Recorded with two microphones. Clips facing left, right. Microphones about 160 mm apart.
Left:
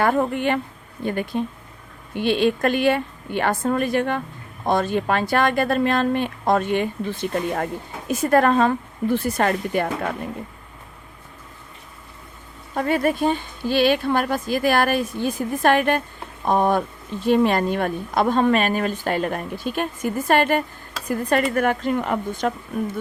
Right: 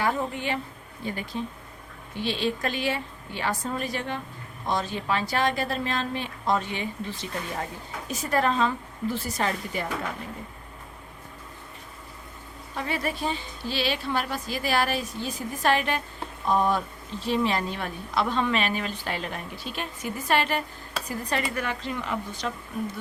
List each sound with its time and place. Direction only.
0.0 s speech: 55° left (ahead or behind)
12.7 s speech: 50° left (ahead or behind)